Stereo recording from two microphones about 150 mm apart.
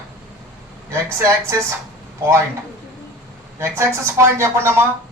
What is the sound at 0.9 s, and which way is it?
Speech, 20° right (ahead or behind).